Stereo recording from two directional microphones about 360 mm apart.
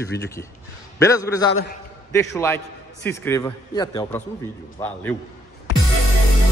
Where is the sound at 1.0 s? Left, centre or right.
Centre.